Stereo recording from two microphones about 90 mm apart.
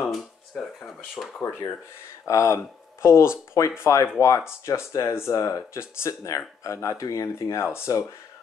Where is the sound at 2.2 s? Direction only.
35° left (ahead or behind).